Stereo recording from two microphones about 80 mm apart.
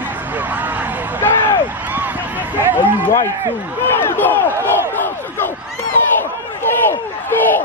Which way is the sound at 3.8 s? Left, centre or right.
Left.